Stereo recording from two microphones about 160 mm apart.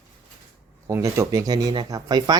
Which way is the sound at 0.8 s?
20° right (ahead or behind).